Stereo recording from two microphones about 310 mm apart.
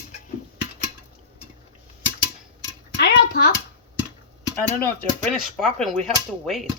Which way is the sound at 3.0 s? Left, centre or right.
Left.